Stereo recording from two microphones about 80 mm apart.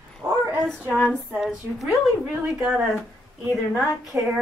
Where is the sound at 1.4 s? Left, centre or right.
Centre.